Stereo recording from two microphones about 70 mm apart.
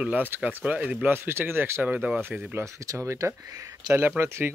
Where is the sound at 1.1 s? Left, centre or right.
Right.